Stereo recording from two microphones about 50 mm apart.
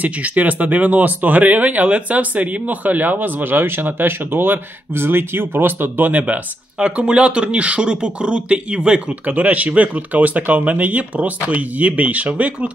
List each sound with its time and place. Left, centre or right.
0.0 s speech: right
9.2 s speech: right